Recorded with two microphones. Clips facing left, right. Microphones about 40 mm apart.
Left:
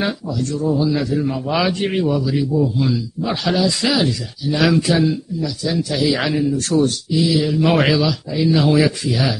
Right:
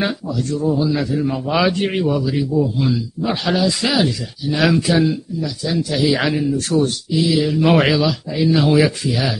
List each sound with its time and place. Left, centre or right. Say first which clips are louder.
0.0 s speech: even; centre
0.7 s a man's voice: even; centre
6.8 s speech: left 1 dB; centre
7.3 s a man's voice: right 3 dB; centre